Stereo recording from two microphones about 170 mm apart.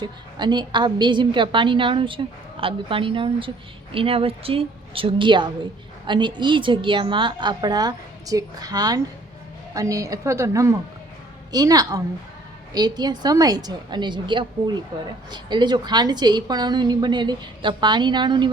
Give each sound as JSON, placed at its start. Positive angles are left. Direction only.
{"t": 0.0, "sound": "a woman's voice", "side_deg": -25}